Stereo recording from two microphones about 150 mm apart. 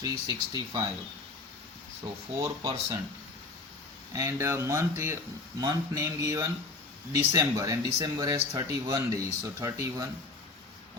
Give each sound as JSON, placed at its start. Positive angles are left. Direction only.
{"t": 0.0, "sound": "speech", "side_deg": -25}
{"t": 2.4, "sound": "speech", "side_deg": -20}
{"t": 4.1, "sound": "speech", "side_deg": -20}